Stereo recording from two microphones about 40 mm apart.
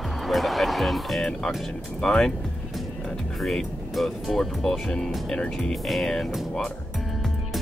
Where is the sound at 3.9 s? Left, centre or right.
Centre.